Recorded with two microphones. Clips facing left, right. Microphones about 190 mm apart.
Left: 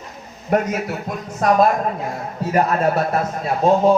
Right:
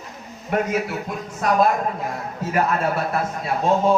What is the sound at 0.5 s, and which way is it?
Speech, 40° left (ahead or behind).